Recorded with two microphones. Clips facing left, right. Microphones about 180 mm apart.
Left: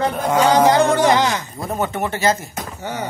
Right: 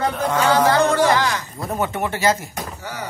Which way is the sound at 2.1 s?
10° right (ahead or behind).